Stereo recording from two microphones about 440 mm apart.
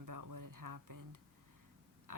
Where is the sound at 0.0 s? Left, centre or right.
Right.